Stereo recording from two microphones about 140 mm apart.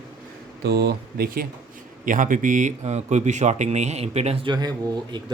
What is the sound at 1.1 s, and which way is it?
Speech, 90° right.